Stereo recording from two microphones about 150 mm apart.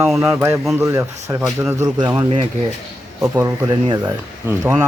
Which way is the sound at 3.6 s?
30° right (ahead or behind).